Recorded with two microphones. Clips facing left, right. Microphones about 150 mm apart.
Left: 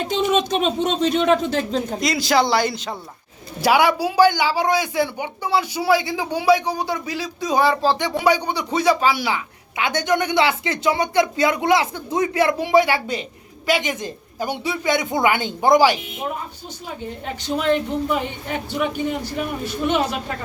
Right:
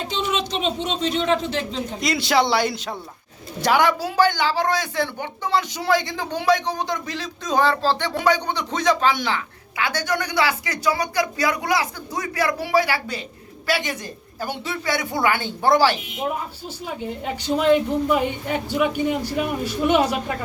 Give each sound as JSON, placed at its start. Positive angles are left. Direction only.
{"t": 0.1, "sound": "speech", "side_deg": 50}
{"t": 2.0, "sound": "a man's voice", "side_deg": 0}
{"t": 3.6, "sound": "speech", "side_deg": 10}
{"t": 9.7, "sound": "speech", "side_deg": 20}
{"t": 17.4, "sound": "speech", "side_deg": -10}